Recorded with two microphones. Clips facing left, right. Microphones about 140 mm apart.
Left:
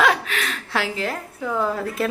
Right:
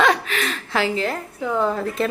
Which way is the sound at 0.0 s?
Centre (ahead or behind).